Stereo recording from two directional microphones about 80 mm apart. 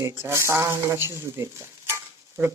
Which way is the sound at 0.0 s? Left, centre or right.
Right.